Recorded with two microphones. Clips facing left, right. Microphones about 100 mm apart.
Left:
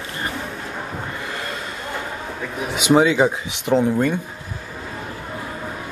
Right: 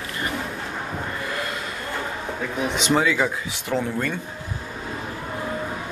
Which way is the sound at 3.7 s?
30° left (ahead or behind).